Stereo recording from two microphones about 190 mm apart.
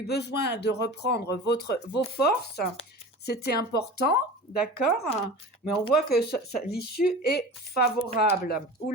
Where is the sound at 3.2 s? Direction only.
60° left (ahead or behind).